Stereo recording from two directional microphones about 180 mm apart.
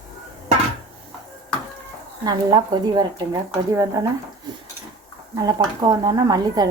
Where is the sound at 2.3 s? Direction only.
25° right (ahead or behind).